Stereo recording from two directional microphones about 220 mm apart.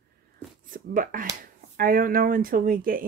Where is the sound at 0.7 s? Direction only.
40° right (ahead or behind).